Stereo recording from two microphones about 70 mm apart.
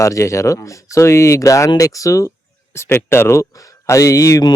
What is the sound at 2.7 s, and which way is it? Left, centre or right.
Speech, left.